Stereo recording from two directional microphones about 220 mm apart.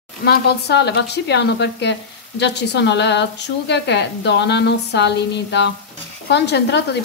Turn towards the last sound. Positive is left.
turn(degrees=50)  # may be behind; listen again after turning